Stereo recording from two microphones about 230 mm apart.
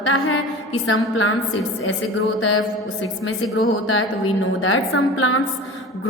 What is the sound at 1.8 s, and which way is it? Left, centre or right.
A woman's voice, left.